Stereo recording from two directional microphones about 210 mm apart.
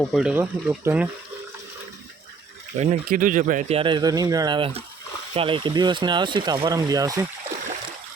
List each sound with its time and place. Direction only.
0.0 s speech: centre (ahead or behind)
2.7 s speech: 30° right (ahead or behind); by 7.3 s 15° right (ahead or behind)